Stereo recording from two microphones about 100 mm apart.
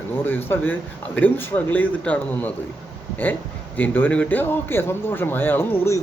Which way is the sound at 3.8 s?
15° left (ahead or behind).